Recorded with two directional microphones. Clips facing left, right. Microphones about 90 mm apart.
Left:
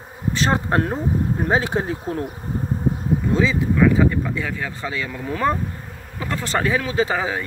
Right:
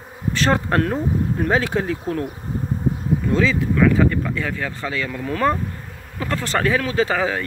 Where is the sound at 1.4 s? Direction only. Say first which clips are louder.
Right 1 dB; 25° left (ahead or behind).